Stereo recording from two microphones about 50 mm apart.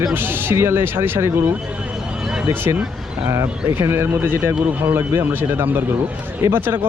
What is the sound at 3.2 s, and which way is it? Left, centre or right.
Speech, right.